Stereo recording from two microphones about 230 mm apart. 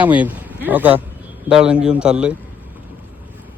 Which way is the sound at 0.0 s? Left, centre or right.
Centre.